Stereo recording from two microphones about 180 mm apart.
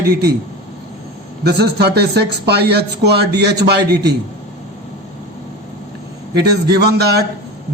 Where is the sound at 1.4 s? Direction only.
65° right (ahead or behind).